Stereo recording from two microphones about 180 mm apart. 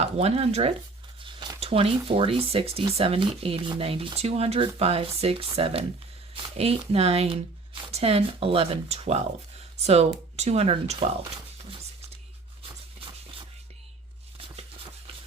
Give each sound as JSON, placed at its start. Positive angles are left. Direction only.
{"t": 0.0, "sound": "speech", "side_deg": -35}
{"t": 1.2, "sound": "a sound", "side_deg": -25}
{"t": 2.0, "sound": "speech", "side_deg": -30}